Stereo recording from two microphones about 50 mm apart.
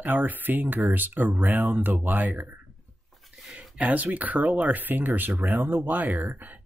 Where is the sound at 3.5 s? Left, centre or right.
Right.